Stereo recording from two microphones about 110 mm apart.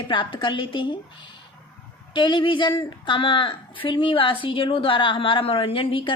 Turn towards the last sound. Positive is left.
turn(degrees=55)  # may be behind; listen again after turning